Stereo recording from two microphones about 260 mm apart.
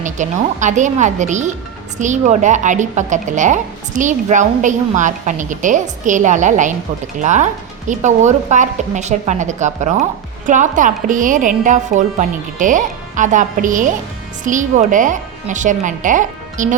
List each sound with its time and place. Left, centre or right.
0.0 s speech: right